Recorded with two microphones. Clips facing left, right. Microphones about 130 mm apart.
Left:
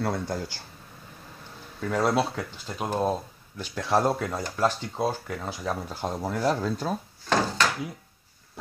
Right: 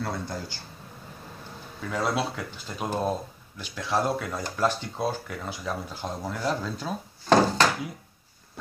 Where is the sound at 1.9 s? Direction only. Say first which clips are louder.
Left 3 dB; centre (ahead or behind).